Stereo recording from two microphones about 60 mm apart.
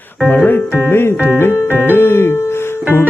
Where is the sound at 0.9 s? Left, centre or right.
Left.